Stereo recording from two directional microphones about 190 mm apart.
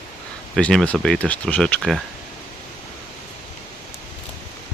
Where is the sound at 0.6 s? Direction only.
5° left (ahead or behind).